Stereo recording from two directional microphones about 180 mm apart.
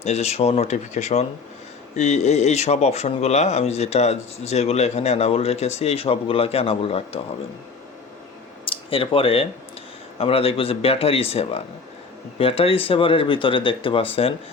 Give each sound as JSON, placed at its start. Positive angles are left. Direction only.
{"t": 0.0, "sound": "speech", "side_deg": 35}
{"t": 8.6, "sound": "speech", "side_deg": 30}